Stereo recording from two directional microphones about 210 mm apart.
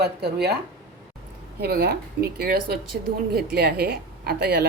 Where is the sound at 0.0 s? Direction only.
50° right (ahead or behind).